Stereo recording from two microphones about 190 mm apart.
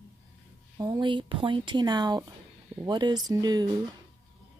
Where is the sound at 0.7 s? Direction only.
20° right (ahead or behind).